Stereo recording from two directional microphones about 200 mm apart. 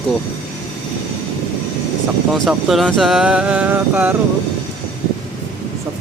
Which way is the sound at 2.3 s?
Centre (ahead or behind).